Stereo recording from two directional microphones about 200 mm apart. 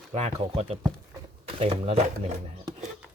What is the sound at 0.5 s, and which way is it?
Speech, 30° right (ahead or behind).